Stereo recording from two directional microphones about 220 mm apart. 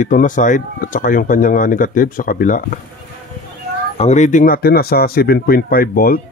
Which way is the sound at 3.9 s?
30° left (ahead or behind).